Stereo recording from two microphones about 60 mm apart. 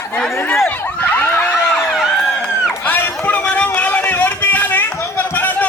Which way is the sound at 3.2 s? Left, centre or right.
Left.